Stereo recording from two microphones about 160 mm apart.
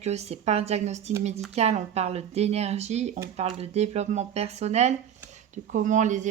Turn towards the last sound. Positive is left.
turn(degrees=-50)  # may be behind; listen again after turning